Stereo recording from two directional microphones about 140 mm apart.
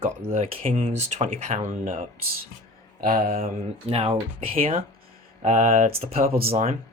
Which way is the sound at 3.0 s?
90° right.